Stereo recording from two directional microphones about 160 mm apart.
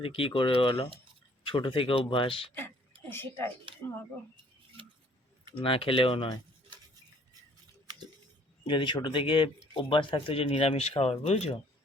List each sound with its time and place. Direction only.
0.0 s speech: 35° left (ahead or behind)
3.1 s speech: 15° left (ahead or behind)
5.5 s speech: 35° left (ahead or behind)
8.6 s speech: 30° left (ahead or behind)